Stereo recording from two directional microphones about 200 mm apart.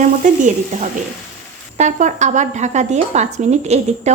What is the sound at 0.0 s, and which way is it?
Speech, 40° right (ahead or behind).